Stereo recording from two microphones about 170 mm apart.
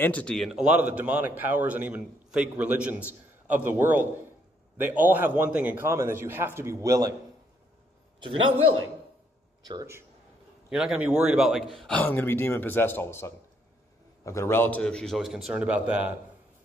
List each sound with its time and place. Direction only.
0.0 s a man's voice: 5° left (ahead or behind); by 7.2 s 20° right (ahead or behind)
8.2 s a man's voice: 30° right (ahead or behind)
9.6 s speech: 25° right (ahead or behind)
10.7 s a man's voice: 5° right (ahead or behind)